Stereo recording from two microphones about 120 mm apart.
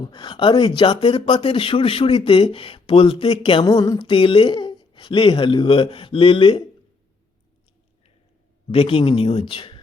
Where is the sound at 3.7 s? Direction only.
35° left (ahead or behind).